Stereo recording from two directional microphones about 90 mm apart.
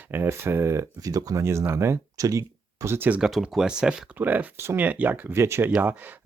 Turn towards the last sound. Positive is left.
turn(degrees=-20)  # may be behind; listen again after turning